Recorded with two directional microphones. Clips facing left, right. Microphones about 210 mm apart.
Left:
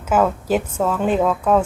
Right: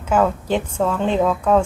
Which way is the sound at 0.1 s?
5° left (ahead or behind).